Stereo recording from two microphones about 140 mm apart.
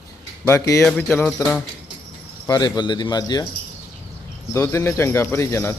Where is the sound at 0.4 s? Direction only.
20° left (ahead or behind).